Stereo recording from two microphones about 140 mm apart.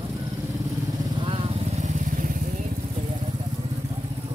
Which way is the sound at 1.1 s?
40° right (ahead or behind).